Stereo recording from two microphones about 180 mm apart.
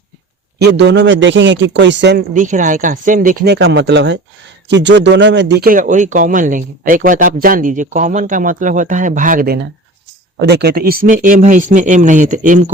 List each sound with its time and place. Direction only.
0.6 s a man's voice: 75° right (ahead or behind)
2.3 s speech: 45° right (ahead or behind)
10.4 s speech: 65° right (ahead or behind); by 12.7 s 45° right (ahead or behind)